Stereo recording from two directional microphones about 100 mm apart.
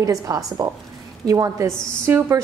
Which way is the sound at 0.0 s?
35° right (ahead or behind).